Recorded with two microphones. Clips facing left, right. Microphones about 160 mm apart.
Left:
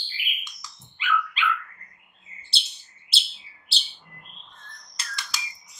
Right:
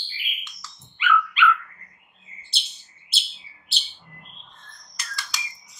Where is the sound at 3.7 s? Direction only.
30° left (ahead or behind).